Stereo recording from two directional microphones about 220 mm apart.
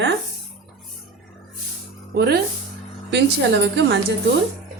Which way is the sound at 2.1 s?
45° right (ahead or behind).